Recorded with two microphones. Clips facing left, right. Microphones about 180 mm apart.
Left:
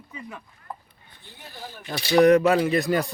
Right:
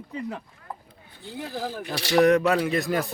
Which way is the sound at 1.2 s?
90° right.